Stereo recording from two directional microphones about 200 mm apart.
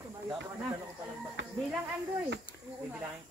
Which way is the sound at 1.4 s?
65° right (ahead or behind).